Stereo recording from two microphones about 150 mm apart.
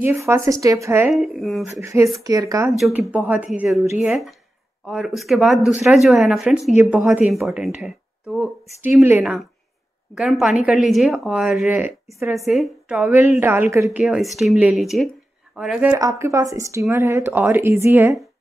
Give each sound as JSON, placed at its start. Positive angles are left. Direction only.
{"t": 0.0, "sound": "speech", "side_deg": -20}
{"t": 1.1, "sound": "a woman's voice", "side_deg": 0}
{"t": 1.8, "sound": "speech", "side_deg": -20}
{"t": 2.8, "sound": "a woman's voice", "side_deg": -5}
{"t": 6.8, "sound": "speech", "side_deg": -15}
{"t": 7.1, "sound": "a woman's voice", "side_deg": 0}
{"t": 12.4, "sound": "a woman's voice", "side_deg": 0}
{"t": 13.0, "sound": "speech", "side_deg": -15}
{"t": 13.9, "sound": "a woman's voice", "side_deg": 0}
{"t": 15.9, "sound": "speech", "side_deg": -20}